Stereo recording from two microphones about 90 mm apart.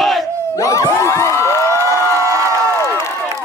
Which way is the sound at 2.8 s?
30° left (ahead or behind).